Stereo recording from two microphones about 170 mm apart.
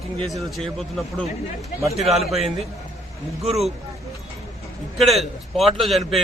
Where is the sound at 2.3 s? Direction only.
35° right (ahead or behind).